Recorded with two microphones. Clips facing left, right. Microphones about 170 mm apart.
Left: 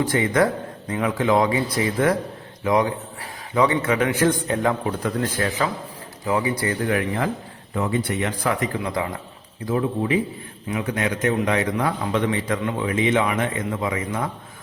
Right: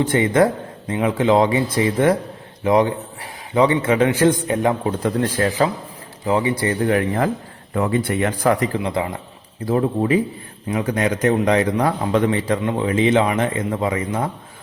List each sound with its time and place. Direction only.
0.0 s speech: 25° right (ahead or behind)
4.9 s a man's voice: 35° right (ahead or behind)
7.7 s speech: 55° right (ahead or behind)
8.5 s speech: 35° right (ahead or behind)
9.6 s a man's voice: 40° right (ahead or behind)